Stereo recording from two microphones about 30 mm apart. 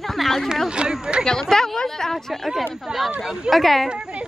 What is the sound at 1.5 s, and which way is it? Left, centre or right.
Speech, centre.